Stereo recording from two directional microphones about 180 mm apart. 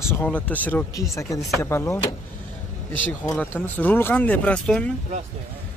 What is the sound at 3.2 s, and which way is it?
Speech, 10° left (ahead or behind).